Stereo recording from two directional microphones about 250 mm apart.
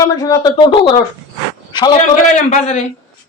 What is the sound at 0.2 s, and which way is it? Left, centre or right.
Speech, centre.